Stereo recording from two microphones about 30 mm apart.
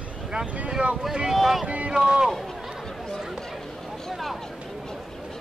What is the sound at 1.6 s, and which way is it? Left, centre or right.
Speech, right.